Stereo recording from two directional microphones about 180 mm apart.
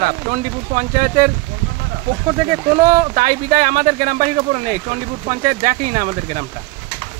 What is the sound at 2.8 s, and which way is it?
Speech, 45° right (ahead or behind).